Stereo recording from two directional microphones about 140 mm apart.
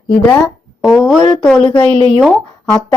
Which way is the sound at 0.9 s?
Centre (ahead or behind).